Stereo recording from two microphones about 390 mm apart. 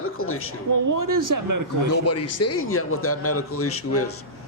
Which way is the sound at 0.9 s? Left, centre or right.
Right.